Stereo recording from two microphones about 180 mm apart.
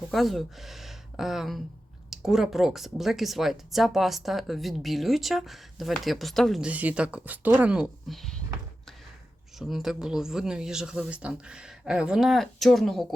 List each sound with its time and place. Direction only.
0.1 s speech: centre (ahead or behind)
9.6 s speech: centre (ahead or behind)